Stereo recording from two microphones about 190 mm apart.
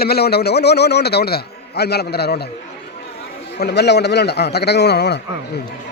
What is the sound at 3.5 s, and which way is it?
A man's voice, 60° left (ahead or behind).